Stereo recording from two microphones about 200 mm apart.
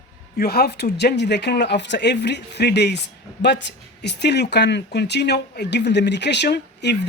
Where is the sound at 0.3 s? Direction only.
50° left (ahead or behind).